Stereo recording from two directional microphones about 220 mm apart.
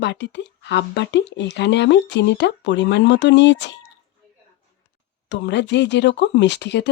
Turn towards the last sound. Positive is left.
turn(degrees=50)  # may be behind; listen again after turning